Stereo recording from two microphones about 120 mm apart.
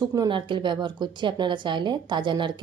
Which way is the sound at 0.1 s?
35° right (ahead or behind).